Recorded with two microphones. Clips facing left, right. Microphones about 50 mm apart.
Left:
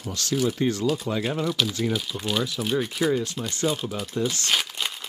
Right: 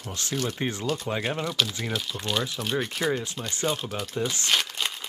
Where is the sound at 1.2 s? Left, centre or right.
Centre.